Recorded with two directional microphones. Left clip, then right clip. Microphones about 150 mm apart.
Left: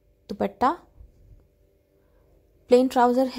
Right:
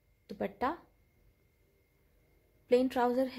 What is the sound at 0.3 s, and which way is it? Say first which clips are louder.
Speech: left 11 dB; 40° left (ahead or behind).